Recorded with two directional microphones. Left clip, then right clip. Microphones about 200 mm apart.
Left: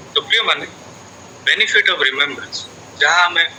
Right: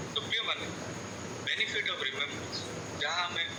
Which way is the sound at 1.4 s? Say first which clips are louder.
Left 18 dB; 45° left (ahead or behind).